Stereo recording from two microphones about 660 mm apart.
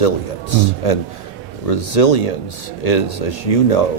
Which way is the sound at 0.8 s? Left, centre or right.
Left.